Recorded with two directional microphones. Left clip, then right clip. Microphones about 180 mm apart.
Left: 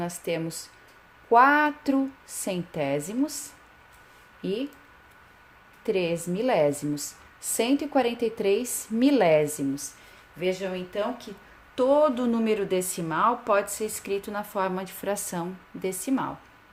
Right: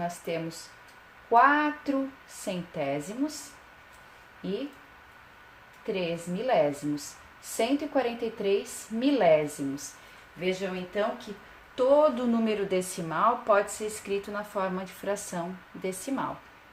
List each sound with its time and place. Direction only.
0.0 s a woman's voice: 50° left (ahead or behind)
5.8 s a woman's voice: 55° left (ahead or behind); by 16.2 s 35° left (ahead or behind)